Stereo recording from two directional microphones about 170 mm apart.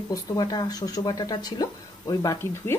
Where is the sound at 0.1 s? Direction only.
20° left (ahead or behind).